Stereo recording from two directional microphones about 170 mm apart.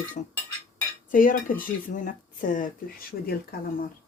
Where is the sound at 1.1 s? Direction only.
55° left (ahead or behind).